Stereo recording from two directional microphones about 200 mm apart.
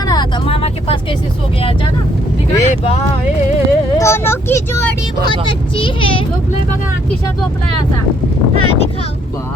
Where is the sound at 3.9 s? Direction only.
15° left (ahead or behind).